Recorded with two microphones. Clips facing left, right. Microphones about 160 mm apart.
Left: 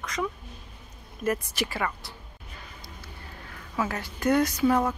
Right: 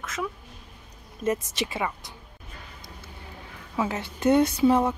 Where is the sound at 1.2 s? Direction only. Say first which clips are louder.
Right 1 dB; 20° right (ahead or behind).